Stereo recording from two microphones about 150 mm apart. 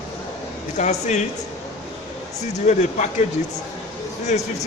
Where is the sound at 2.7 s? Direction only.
50° left (ahead or behind).